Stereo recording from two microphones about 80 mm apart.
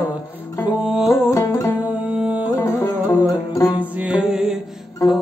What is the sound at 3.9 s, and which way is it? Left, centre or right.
Music, centre.